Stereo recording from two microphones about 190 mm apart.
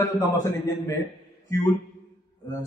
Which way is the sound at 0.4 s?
15° left (ahead or behind).